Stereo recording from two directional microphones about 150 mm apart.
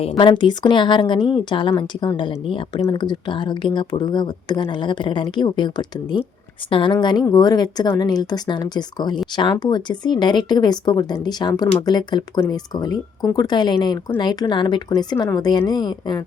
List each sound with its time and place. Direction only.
0.2 s speech: 30° left (ahead or behind)